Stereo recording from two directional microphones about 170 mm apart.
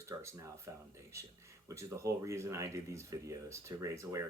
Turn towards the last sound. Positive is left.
turn(degrees=-15)  # may be behind; listen again after turning